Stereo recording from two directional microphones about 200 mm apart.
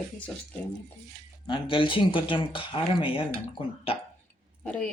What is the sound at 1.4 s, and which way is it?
Speech, 25° left (ahead or behind).